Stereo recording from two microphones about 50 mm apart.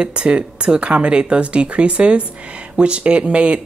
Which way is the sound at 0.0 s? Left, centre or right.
Centre.